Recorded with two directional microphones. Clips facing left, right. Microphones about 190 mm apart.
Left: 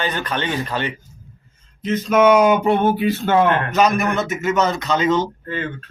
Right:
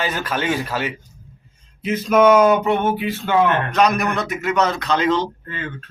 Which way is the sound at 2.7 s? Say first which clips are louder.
Left 3 dB; 35° left (ahead or behind).